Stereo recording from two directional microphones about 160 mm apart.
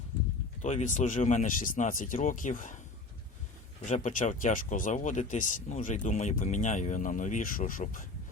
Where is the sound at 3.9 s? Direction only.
50° left (ahead or behind).